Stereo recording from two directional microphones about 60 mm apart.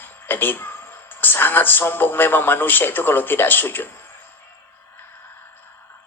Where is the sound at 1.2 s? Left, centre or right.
Left.